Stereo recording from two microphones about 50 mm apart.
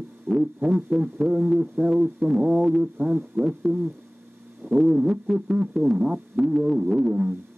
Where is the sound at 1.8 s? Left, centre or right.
Centre.